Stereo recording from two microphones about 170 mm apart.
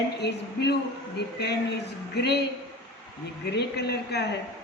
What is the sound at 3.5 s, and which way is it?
Speech, 75° left (ahead or behind).